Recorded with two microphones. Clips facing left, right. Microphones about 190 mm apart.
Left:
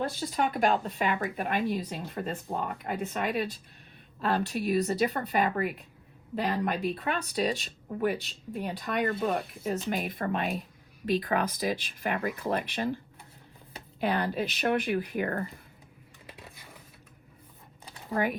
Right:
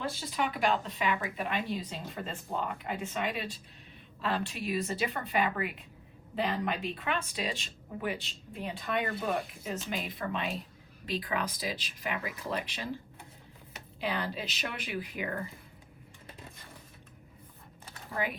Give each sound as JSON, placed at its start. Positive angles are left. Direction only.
{"t": 0.2, "sound": "speech", "side_deg": 45}
{"t": 9.0, "sound": "speech", "side_deg": 50}
{"t": 14.0, "sound": "speech", "side_deg": 50}